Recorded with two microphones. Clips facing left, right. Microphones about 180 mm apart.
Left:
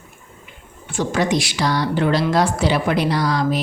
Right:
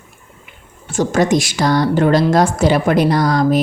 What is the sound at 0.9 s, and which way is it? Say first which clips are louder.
A woman's voice: right 5 dB; 45° right (ahead or behind).